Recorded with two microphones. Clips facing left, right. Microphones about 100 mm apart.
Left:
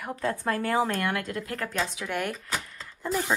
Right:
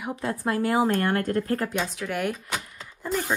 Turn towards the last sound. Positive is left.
turn(degrees=0)  # may be behind; listen again after turning